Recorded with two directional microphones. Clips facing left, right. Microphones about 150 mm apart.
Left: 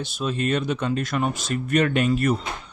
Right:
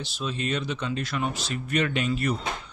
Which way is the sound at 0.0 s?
50° left (ahead or behind).